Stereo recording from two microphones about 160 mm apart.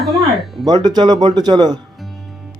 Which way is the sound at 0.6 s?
25° right (ahead or behind).